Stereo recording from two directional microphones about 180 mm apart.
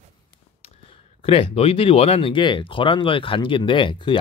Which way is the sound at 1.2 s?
30° left (ahead or behind).